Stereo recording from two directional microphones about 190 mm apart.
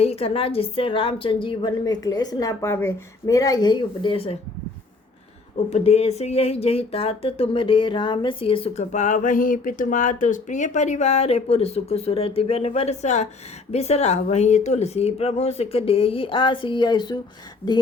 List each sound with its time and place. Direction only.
0.0 s a woman's voice: 30° left (ahead or behind)
5.7 s speech: 35° left (ahead or behind)
17.6 s speech: 10° left (ahead or behind)